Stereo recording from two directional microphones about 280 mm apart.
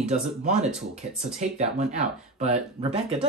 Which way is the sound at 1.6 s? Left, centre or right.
Right.